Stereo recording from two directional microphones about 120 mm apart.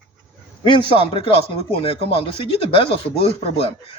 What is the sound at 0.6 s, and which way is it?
Speech, 45° left (ahead or behind).